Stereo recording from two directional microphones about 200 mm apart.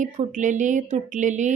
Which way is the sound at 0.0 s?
40° right (ahead or behind).